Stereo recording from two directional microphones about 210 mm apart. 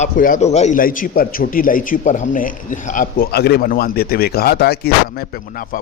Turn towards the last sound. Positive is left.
turn(degrees=45)  # may be behind; listen again after turning